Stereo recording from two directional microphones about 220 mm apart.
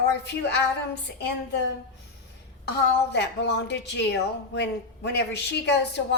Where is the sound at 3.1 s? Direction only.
50° left (ahead or behind).